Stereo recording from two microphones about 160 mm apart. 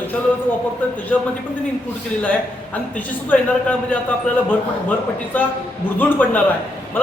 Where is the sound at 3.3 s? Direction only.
10° left (ahead or behind).